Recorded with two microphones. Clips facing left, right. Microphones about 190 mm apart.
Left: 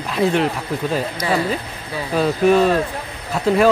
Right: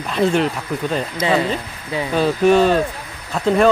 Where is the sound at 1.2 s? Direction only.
20° right (ahead or behind).